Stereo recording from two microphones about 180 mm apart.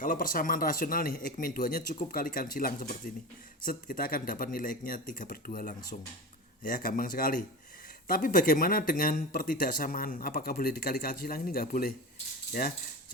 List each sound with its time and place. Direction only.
0.0 s speech: 50° left (ahead or behind)